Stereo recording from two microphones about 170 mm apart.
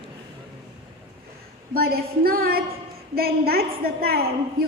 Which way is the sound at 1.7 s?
60° right (ahead or behind).